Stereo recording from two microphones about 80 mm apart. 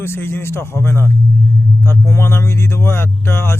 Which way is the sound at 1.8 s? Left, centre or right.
Left.